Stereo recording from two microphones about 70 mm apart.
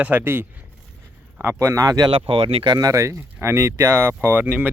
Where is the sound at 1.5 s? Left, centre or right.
Right.